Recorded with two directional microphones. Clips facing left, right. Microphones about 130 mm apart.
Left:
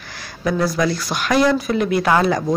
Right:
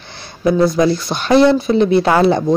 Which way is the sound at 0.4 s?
25° right (ahead or behind).